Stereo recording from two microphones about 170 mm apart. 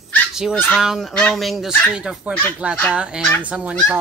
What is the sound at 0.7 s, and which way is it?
Speech, centre (ahead or behind).